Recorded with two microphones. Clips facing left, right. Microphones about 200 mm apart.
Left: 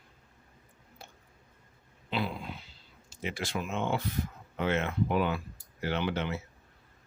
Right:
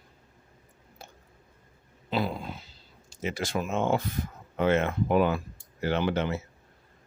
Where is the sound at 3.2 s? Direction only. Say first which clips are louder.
Right 4 dB; 45° right (ahead or behind).